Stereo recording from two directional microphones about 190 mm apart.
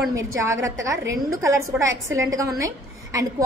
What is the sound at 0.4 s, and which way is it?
A woman's voice, 15° right (ahead or behind).